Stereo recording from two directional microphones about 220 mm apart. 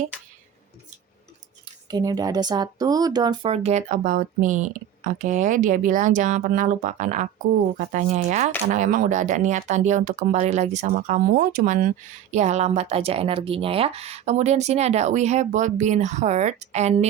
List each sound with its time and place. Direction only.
1.9 s speech: 15° right (ahead or behind)